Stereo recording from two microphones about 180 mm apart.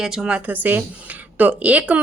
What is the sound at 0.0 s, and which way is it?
Speech, 5° right (ahead or behind).